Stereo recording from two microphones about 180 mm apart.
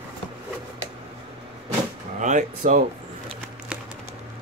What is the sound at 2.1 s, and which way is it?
Speech, 40° right (ahead or behind).